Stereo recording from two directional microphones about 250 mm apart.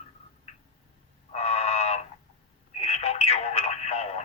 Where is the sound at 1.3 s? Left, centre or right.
Left.